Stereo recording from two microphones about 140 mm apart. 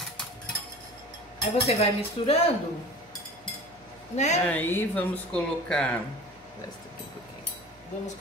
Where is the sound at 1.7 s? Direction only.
50° left (ahead or behind).